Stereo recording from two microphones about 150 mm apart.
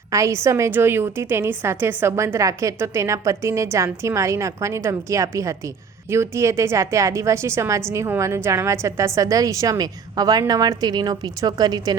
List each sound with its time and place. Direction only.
0.1 s a woman's voice: 20° right (ahead or behind)